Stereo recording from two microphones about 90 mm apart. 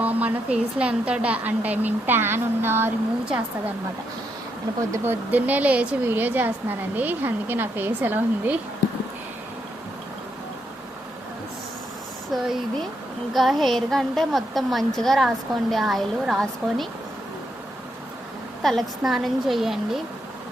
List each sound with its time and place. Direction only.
0.0 s a woman's voice: 15° right (ahead or behind)
5.0 s a woman's voice: 20° right (ahead or behind)
13.3 s a woman's voice: centre (ahead or behind)
18.6 s a woman's voice: centre (ahead or behind)